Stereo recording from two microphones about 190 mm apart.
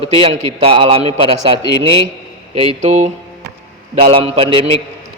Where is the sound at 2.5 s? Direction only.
40° right (ahead or behind).